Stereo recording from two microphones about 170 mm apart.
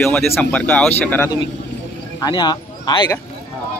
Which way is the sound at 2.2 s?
25° left (ahead or behind).